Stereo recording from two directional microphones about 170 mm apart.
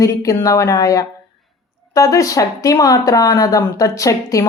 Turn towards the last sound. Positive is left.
turn(degrees=20)  # may be behind; listen again after turning